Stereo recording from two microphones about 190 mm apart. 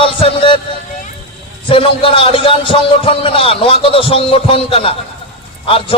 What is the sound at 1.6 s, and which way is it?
A man's voice, 30° left (ahead or behind).